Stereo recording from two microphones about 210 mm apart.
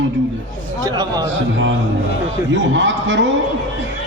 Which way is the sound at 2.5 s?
60° right (ahead or behind).